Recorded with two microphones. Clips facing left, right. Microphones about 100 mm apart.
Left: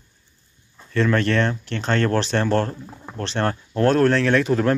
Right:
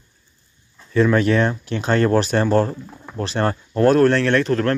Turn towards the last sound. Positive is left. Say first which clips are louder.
# right 1 dB
turn(degrees=10)  # may be behind; listen again after turning